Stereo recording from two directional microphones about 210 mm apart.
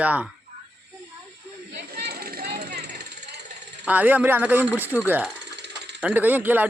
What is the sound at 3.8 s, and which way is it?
Speech, 10° right (ahead or behind).